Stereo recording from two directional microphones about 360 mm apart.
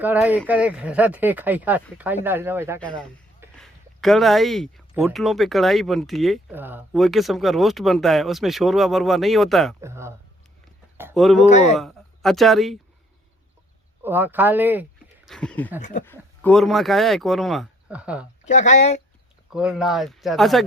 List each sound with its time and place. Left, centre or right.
0.0 s speech: centre
11.4 s speech: centre
11.8 s speech: centre
14.0 s speech: centre
15.8 s speech: left
16.0 s speech: centre
18.4 s speech: centre
19.5 s speech: centre